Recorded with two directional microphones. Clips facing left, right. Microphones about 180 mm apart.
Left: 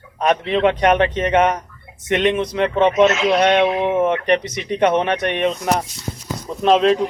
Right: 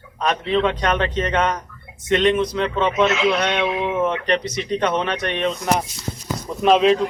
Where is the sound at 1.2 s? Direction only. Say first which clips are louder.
Left 4 dB; 15° left (ahead or behind).